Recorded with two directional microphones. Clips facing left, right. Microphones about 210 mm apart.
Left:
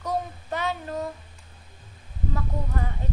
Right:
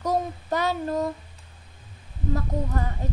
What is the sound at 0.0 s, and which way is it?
Child singing, 40° right (ahead or behind).